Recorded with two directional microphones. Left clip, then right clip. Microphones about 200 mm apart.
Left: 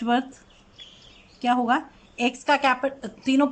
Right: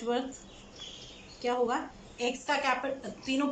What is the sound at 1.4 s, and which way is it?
A woman's voice, 55° left (ahead or behind).